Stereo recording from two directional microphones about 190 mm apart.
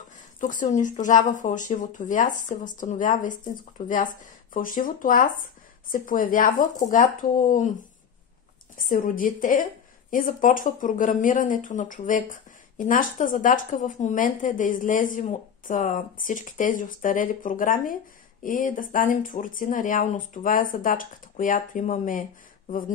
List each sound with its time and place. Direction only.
0.4 s speech: 45° left (ahead or behind)
8.7 s speech: 45° left (ahead or behind)